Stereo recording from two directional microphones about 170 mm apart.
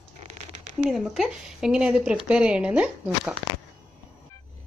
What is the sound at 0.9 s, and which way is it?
A woman's voice, centre (ahead or behind).